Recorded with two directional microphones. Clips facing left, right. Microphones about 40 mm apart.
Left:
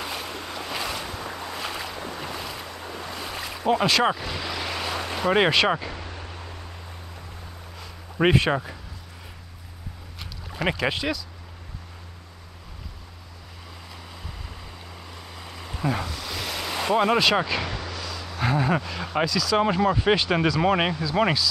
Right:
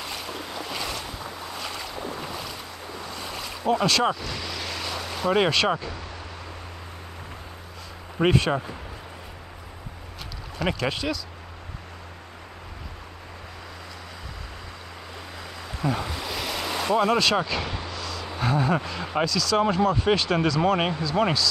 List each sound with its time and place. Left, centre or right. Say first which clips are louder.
0.0 s waves: left 1 dB; centre
0.6 s boat: left 2 dB; centre
3.8 s vehicle: left 1 dB; centre
8.2 s speech: left 1 dB; centre
10.6 s speech: left 1 dB; centre
15.8 s a sound: even; left
16.3 s waves: right 2 dB; centre
16.8 s speech: left 1 dB; centre
17.9 s a sound: right 1 dB; centre
18.4 s speech: even; centre